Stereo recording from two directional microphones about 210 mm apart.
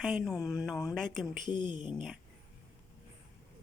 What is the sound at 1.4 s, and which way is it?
Speech, 20° left (ahead or behind).